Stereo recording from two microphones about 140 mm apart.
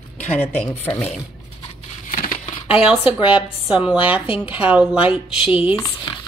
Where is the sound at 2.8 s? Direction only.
5° right (ahead or behind).